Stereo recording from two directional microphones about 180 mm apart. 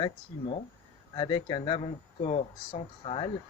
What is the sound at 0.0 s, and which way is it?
Speech, 30° left (ahead or behind).